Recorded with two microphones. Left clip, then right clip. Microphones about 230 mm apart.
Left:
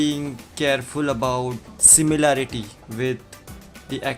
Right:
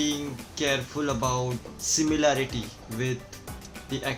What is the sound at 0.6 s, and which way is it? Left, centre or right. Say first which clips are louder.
Speech: left 6 dB; left.